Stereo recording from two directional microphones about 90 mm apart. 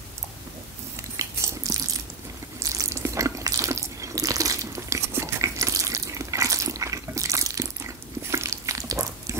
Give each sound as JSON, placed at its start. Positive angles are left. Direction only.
{"t": 1.1, "sound": "biting", "side_deg": -35}
{"t": 2.6, "sound": "water", "side_deg": -35}